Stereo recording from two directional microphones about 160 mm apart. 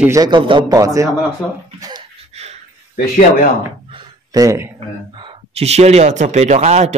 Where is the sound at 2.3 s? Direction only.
40° right (ahead or behind).